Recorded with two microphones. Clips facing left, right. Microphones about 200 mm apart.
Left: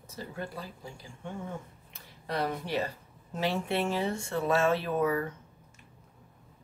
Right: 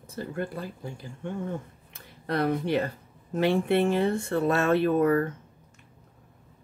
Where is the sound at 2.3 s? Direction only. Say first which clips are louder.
Right 6 dB; 55° right (ahead or behind).